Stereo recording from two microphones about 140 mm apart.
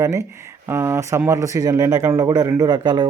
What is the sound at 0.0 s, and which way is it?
Speech, 20° right (ahead or behind).